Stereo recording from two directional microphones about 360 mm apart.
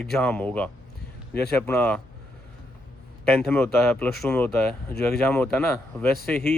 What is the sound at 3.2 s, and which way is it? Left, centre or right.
Speech, centre.